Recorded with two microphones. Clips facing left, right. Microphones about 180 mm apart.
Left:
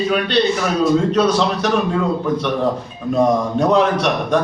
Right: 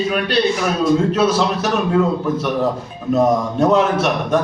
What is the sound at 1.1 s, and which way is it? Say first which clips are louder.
Speech: even; 5° right (ahead or behind).